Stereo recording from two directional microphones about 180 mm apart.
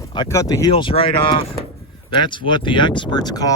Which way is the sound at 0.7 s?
30° left (ahead or behind).